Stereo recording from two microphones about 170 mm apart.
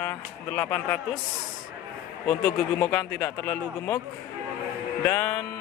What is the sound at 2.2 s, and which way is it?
A man's voice, 15° left (ahead or behind).